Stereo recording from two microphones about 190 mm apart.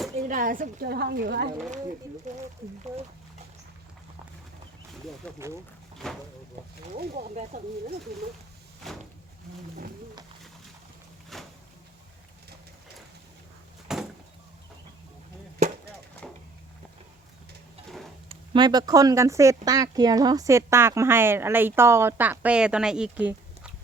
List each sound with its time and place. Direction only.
0.2 s a woman's voice: 45° right (ahead or behind)
2.3 s speech: 40° right (ahead or behind)
5.2 s speech: 5° left (ahead or behind)
7.2 s speech: 40° right (ahead or behind)
8.8 s speech: centre (ahead or behind)
11.3 s a sound: centre (ahead or behind)
13.9 s a sound: centre (ahead or behind)
18.3 s speech: 25° right (ahead or behind); by 23.7 s 5° right (ahead or behind)